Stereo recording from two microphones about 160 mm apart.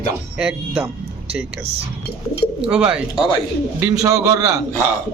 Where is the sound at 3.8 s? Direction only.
20° right (ahead or behind).